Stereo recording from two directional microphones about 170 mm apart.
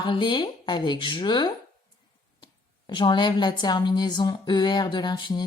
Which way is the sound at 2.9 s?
25° left (ahead or behind).